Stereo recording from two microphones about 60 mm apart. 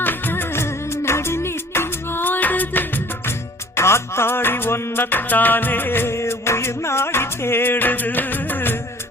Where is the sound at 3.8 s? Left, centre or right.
Left.